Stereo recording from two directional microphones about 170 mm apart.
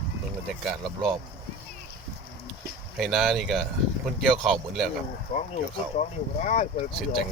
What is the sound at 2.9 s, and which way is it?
Speech, centre (ahead or behind).